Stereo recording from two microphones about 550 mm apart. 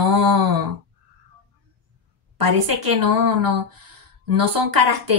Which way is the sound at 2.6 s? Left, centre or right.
Right.